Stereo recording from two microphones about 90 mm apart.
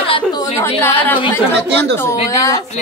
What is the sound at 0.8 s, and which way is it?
Speech, 20° left (ahead or behind).